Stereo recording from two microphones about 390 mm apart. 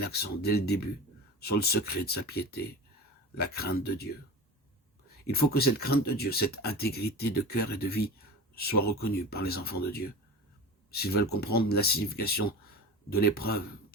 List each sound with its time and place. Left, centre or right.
0.0 s speech: left
5.2 s speech: left